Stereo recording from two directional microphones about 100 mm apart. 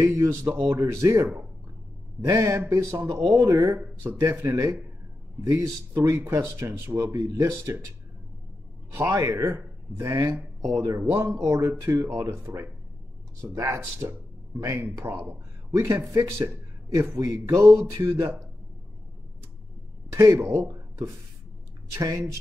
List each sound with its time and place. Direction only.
0.0 s speech: 30° right (ahead or behind)
3.7 s speech: 20° right (ahead or behind)
9.1 s speech: 30° right (ahead or behind)
11.0 s speech: 25° right (ahead or behind)
17.2 s speech: 30° right (ahead or behind)
20.2 s speech: 25° right (ahead or behind)
21.9 s speech: 35° right (ahead or behind)